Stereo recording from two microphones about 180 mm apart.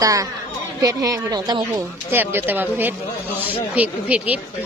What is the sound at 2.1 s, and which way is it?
Speech, 10° right (ahead or behind).